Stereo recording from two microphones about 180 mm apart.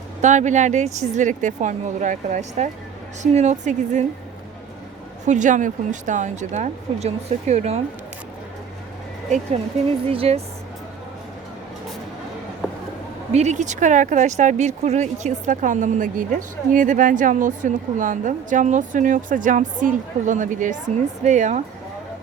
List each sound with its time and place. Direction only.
0.2 s speech: 40° right (ahead or behind)
5.2 s speech: 45° right (ahead or behind)
10.1 s speech: 35° right (ahead or behind)
13.3 s speech: 40° right (ahead or behind)